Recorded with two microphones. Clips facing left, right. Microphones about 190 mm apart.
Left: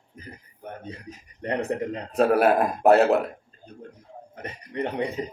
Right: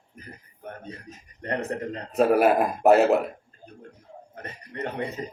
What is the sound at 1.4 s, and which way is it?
Speech, 25° left (ahead or behind).